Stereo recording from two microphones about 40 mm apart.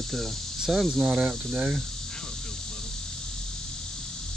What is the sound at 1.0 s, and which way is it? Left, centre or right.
Speech, right.